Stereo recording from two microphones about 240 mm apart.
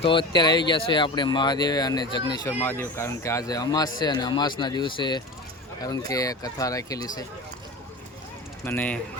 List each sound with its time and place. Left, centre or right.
0.0 s speech: left
8.6 s speech: centre